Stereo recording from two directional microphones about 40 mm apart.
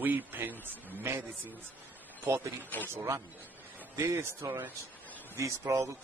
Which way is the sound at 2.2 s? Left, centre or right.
Right.